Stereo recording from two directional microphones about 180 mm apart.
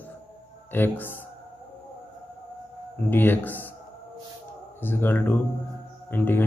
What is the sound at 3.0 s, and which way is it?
Speech, 10° left (ahead or behind).